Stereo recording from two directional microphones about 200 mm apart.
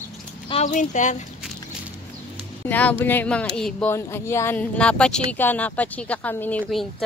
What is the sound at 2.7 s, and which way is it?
Speech, 10° left (ahead or behind).